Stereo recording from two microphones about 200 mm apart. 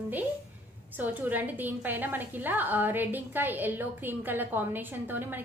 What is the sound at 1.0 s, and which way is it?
A woman's voice, 10° right (ahead or behind).